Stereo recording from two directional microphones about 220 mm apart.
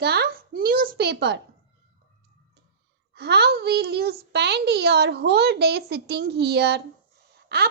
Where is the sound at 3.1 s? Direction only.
50° right (ahead or behind).